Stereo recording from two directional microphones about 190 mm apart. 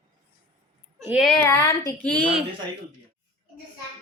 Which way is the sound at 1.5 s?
15° left (ahead or behind).